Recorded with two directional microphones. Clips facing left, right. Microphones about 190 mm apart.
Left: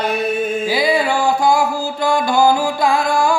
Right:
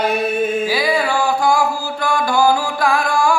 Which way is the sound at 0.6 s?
20° left (ahead or behind).